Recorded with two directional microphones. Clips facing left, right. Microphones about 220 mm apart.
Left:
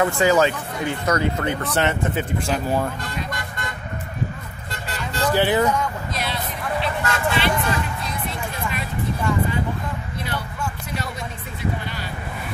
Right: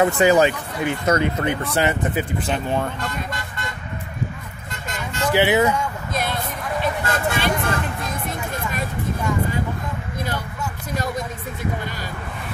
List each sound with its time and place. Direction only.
0.0 s speech: 20° right (ahead or behind)
1.7 s speech: 5° right (ahead or behind)
4.8 s vehicle: 35° left (ahead or behind)
5.3 s speech: 10° right (ahead or behind)
6.1 s a sound: 50° right (ahead or behind)